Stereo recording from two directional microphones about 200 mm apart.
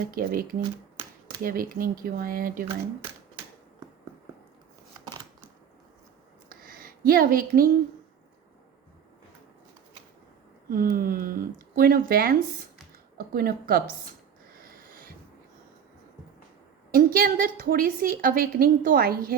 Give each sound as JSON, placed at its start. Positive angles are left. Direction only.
{"t": 0.1, "sound": "a woman's voice", "side_deg": -45}
{"t": 1.5, "sound": "a woman's voice", "side_deg": -45}
{"t": 6.5, "sound": "a sound", "side_deg": -45}
{"t": 10.7, "sound": "a woman's voice", "side_deg": -45}
{"t": 14.5, "sound": "a sound", "side_deg": -45}
{"t": 16.9, "sound": "a woman's voice", "side_deg": -45}